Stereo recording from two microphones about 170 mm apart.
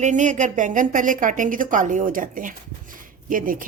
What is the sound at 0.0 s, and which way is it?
Speech, 45° right (ahead or behind).